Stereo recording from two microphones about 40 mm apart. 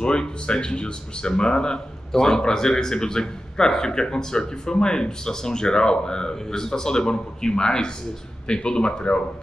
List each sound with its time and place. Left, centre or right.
0.0 s speech: left